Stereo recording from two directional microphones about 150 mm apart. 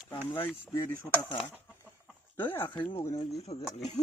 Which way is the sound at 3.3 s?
45° left (ahead or behind).